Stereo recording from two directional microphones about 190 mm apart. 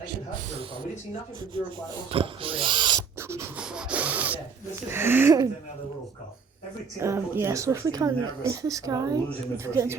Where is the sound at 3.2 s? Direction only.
15° right (ahead or behind).